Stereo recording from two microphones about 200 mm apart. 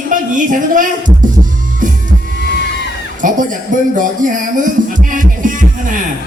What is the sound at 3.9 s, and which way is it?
Music, 40° right (ahead or behind).